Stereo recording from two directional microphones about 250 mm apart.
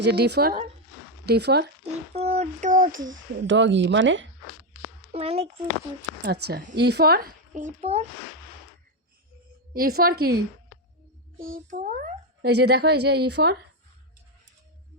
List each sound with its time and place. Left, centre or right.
0.0 s a child's voice: right
1.8 s speech: right
3.1 s speech: right
5.1 s speech: right
6.5 s a child's voice: right
9.7 s a child's voice: right
11.3 s a child's voice: right